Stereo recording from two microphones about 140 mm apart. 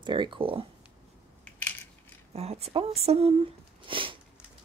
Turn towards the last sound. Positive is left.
turn(degrees=-35)  # may be behind; listen again after turning